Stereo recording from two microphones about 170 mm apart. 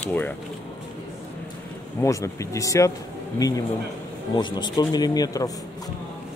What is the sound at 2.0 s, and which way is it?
Speech, 20° left (ahead or behind).